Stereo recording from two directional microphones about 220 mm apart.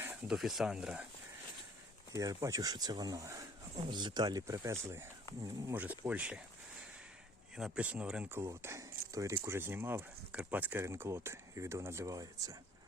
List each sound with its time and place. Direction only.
0.0 s speech: 10° right (ahead or behind)
2.1 s speech: 15° right (ahead or behind)
7.5 s speech: 5° right (ahead or behind)